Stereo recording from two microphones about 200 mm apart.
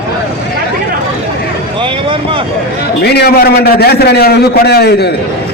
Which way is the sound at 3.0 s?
50° left (ahead or behind).